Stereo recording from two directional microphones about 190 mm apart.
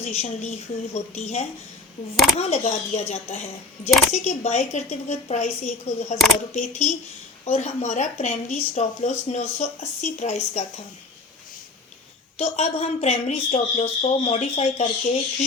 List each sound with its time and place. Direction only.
0.0 s speech: 35° left (ahead or behind)
12.4 s speech: 35° left (ahead or behind)